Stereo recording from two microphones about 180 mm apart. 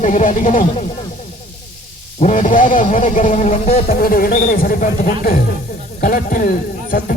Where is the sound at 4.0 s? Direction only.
55° left (ahead or behind).